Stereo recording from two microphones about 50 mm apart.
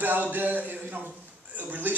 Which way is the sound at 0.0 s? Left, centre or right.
Right.